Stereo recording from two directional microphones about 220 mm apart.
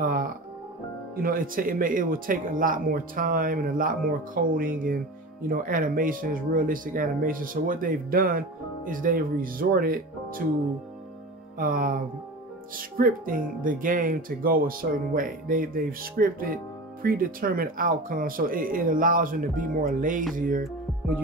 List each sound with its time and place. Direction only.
0.0 s music: 40° right (ahead or behind)
1.1 s speech: 40° right (ahead or behind)
11.5 s speech: 40° right (ahead or behind)